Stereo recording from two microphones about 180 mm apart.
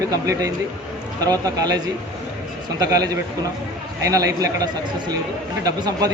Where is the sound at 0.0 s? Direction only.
20° right (ahead or behind).